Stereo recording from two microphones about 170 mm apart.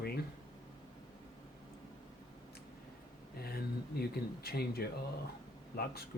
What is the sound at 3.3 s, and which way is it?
Speech, 65° left (ahead or behind).